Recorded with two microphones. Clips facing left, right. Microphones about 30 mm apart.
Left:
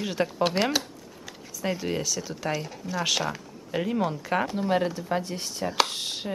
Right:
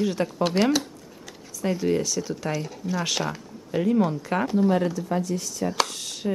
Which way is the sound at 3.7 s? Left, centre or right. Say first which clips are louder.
Right 5 dB; centre.